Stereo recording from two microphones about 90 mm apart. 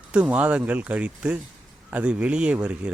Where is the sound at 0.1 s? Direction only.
15° right (ahead or behind).